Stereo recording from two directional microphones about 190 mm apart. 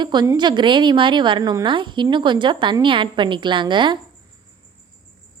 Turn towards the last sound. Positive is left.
turn(degrees=-25)  # may be behind; listen again after turning